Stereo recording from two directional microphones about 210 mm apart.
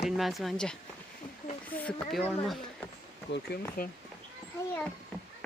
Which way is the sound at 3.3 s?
45° left (ahead or behind).